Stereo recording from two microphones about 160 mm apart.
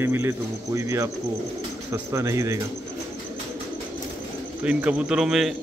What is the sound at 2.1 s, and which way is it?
Speech, 20° right (ahead or behind).